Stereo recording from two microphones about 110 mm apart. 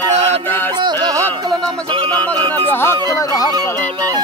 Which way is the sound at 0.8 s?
40° right (ahead or behind).